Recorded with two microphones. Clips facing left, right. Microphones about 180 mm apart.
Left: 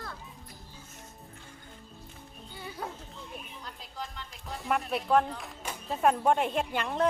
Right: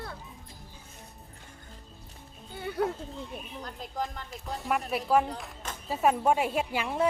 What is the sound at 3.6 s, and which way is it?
Music, 45° right (ahead or behind).